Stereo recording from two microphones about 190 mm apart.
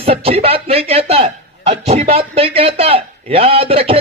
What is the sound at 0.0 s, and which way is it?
A man's voice, 30° right (ahead or behind).